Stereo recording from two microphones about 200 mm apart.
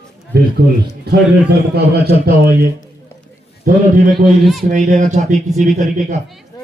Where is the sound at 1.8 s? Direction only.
50° right (ahead or behind).